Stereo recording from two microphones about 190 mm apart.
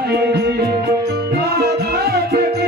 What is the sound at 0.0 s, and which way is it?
Music, 60° right (ahead or behind).